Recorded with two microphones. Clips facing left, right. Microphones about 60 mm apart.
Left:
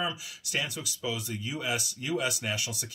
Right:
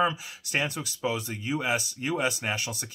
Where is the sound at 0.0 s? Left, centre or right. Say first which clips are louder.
Right 7 dB; right.